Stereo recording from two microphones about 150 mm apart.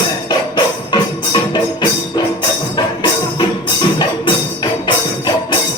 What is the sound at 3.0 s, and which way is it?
Music, 30° left (ahead or behind).